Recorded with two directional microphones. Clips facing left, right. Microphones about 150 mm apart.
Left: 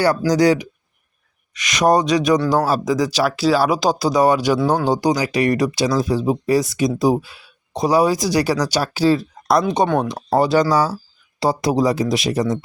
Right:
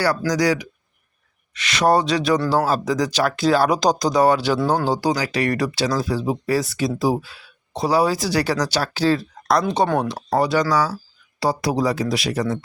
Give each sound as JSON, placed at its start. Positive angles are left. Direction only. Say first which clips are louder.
{"t": 0.0, "sound": "speech", "louder": "left 4 dB", "side_deg": 20}
{"t": 10.3, "sound": "speech", "louder": "left 3 dB", "side_deg": 30}
{"t": 10.8, "sound": "speech", "louder": "left 3 dB", "side_deg": 20}